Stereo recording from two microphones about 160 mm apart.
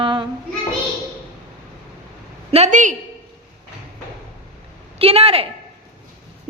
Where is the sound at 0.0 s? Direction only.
30° right (ahead or behind).